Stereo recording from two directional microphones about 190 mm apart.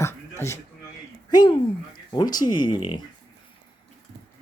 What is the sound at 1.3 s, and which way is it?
Speech, 20° left (ahead or behind).